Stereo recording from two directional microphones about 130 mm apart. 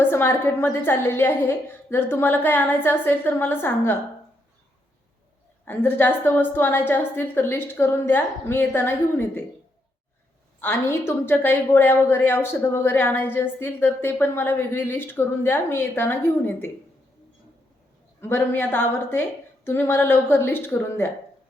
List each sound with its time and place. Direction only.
0.0 s a woman's voice: 15° left (ahead or behind)
5.6 s a woman's voice: 15° left (ahead or behind)
10.6 s a woman's voice: 15° left (ahead or behind)
18.2 s a woman's voice: 15° left (ahead or behind)